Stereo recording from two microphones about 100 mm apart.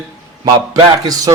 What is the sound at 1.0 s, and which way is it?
Speech, 40° right (ahead or behind).